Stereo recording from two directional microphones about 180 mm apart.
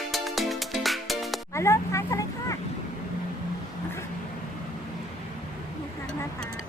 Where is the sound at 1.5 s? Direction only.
15° left (ahead or behind).